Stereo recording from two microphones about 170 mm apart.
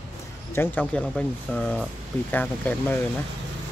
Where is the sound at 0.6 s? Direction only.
10° left (ahead or behind).